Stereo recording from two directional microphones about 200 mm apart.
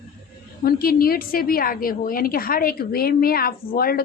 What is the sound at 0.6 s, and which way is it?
A woman's voice, 50° left (ahead or behind).